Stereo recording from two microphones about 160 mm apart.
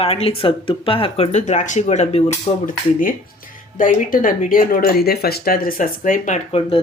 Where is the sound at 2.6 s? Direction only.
60° left (ahead or behind).